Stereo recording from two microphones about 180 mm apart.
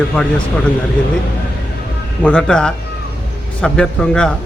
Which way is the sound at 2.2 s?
5° left (ahead or behind).